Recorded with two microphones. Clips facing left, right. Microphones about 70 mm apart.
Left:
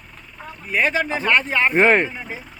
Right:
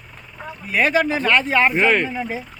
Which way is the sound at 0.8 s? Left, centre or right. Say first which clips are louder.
Right 3 dB; centre.